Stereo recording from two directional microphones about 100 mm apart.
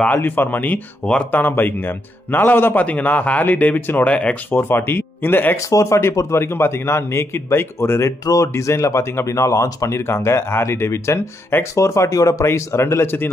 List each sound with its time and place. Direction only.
0.0 s a man's voice: 20° left (ahead or behind)
5.6 s a man's voice: 30° left (ahead or behind)